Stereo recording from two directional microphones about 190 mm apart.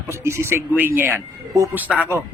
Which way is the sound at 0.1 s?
15° right (ahead or behind).